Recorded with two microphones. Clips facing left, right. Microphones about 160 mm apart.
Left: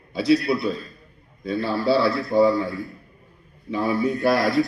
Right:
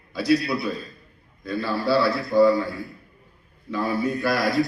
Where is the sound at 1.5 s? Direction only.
30° left (ahead or behind).